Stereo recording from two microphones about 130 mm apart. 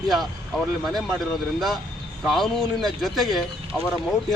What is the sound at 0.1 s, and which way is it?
Speech, centre (ahead or behind).